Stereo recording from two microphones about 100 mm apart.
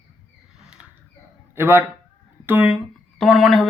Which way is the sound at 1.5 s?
20° right (ahead or behind).